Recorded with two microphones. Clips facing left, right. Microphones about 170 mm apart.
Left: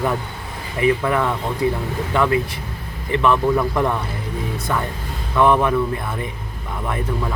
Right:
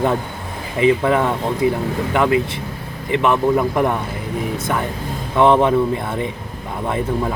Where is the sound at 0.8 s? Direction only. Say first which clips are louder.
Right 3 dB; 20° right (ahead or behind).